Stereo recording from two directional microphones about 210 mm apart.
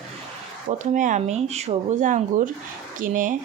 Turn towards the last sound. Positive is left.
turn(degrees=-40)  # may be behind; listen again after turning